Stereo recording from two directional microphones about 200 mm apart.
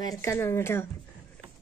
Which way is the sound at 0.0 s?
15° left (ahead or behind).